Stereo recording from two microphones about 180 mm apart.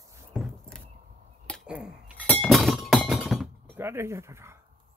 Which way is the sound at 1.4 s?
Centre (ahead or behind).